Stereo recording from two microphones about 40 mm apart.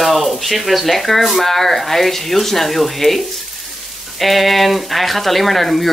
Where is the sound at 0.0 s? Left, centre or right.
Centre.